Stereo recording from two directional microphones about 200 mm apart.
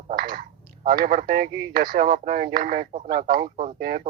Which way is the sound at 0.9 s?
45° right (ahead or behind).